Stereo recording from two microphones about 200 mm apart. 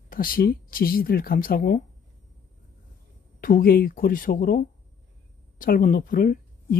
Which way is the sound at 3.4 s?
45° left (ahead or behind).